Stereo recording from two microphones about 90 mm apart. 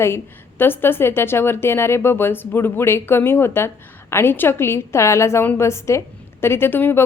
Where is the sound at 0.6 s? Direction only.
25° left (ahead or behind).